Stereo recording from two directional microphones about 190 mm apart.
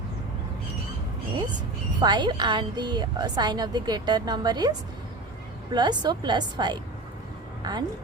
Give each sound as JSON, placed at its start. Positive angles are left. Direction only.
{"t": 2.0, "sound": "a woman's voice", "side_deg": -25}
{"t": 5.7, "sound": "a woman's voice", "side_deg": -20}